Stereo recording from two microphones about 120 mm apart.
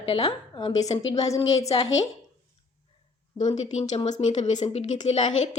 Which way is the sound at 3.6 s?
70° left (ahead or behind).